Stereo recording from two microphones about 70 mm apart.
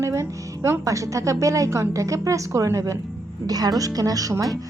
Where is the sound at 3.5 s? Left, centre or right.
Right.